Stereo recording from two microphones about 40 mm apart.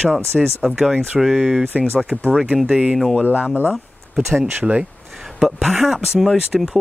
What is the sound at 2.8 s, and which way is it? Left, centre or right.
Speech, centre.